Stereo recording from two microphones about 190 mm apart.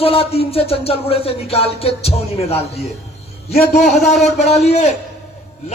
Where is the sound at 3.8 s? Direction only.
Centre (ahead or behind).